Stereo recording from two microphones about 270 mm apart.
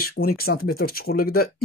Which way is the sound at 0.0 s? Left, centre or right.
Left.